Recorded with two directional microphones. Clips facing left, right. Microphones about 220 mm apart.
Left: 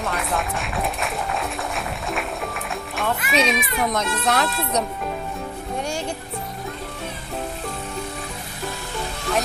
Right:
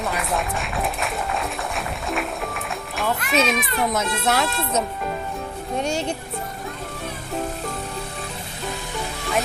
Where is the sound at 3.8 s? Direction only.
5° right (ahead or behind).